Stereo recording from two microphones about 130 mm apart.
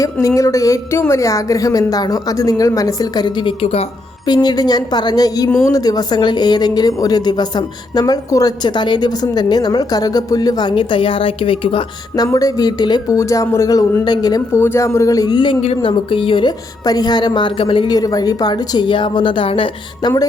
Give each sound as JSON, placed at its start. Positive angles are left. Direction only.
{"t": 0.0, "sound": "a woman's voice", "side_deg": 25}
{"t": 4.3, "sound": "a woman's voice", "side_deg": 30}